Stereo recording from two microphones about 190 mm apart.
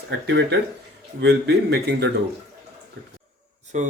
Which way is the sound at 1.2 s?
65° right (ahead or behind).